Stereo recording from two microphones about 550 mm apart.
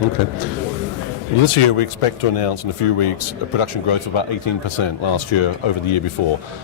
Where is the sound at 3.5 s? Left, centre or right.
Left.